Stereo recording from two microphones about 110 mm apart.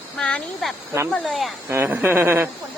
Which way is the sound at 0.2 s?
5° left (ahead or behind).